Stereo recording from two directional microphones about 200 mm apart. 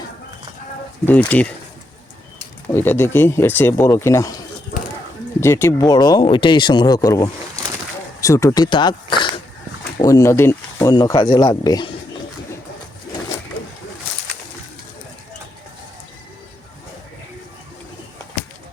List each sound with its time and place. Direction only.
1.3 s speech: 5° left (ahead or behind)
2.7 s speech: 10° left (ahead or behind)
5.4 s speech: 15° left (ahead or behind)